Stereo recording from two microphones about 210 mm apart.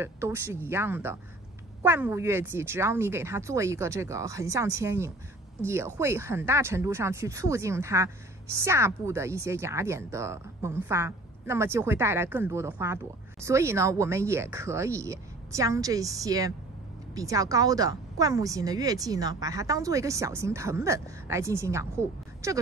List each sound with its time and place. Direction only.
0.0 s speech: 10° right (ahead or behind)